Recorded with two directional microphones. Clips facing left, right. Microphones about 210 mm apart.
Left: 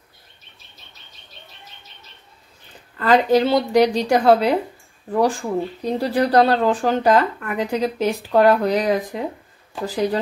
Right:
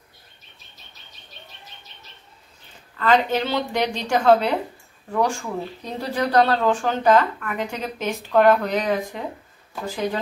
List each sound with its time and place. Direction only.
3.0 s speech: 35° left (ahead or behind)